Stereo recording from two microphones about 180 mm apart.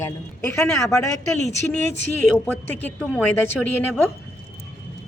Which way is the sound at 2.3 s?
10° left (ahead or behind).